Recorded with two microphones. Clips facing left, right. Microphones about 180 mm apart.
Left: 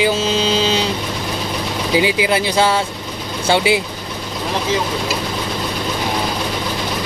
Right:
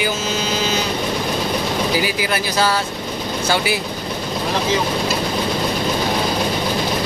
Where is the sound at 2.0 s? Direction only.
20° left (ahead or behind).